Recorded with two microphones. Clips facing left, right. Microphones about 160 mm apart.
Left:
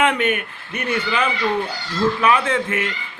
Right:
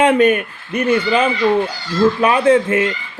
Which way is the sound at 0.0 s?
35° right (ahead or behind).